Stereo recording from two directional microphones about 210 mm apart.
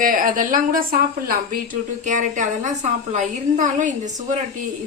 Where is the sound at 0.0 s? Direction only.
40° right (ahead or behind).